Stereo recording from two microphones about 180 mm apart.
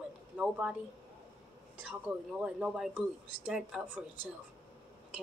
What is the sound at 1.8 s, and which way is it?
Speech, 10° right (ahead or behind).